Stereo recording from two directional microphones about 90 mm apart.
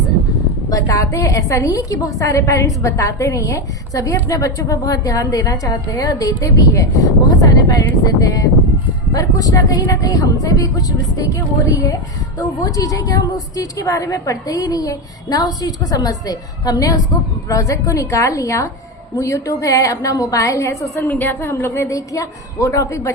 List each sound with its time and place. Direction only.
0.7 s a woman's voice: 40° left (ahead or behind)
21.0 s a woman's voice: 20° left (ahead or behind)